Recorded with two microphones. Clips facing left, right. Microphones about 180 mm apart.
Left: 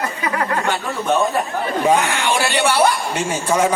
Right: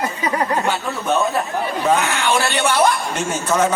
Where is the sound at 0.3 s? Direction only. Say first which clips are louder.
Right 1 dB; 20° right (ahead or behind).